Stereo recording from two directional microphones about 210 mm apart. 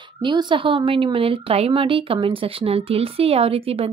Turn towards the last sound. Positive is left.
turn(degrees=-25)  # may be behind; listen again after turning